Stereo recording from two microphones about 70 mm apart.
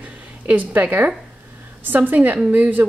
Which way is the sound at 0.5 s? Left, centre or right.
Right.